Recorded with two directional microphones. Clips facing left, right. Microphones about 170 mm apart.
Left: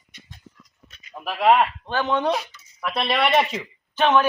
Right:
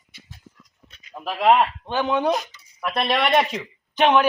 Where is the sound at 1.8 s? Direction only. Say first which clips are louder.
Right 1 dB; 15° right (ahead or behind).